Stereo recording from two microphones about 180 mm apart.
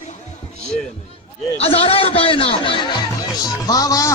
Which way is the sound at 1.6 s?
35° left (ahead or behind).